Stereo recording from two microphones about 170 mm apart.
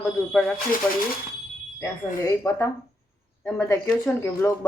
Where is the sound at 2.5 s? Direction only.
20° left (ahead or behind).